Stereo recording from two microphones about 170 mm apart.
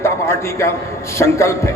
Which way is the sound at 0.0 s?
15° left (ahead or behind).